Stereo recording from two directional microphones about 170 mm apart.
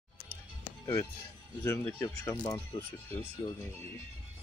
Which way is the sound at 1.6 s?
15° left (ahead or behind).